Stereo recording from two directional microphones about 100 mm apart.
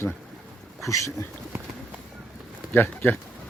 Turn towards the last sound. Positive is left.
turn(degrees=20)  # may be behind; listen again after turning